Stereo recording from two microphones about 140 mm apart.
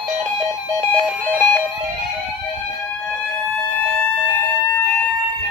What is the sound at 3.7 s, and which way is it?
Siren, 10° left (ahead or behind).